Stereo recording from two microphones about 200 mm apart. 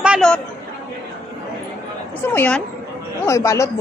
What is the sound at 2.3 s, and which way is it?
A woman's voice, 5° left (ahead or behind).